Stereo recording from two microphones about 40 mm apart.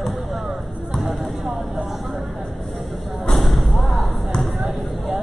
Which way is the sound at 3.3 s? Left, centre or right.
Centre.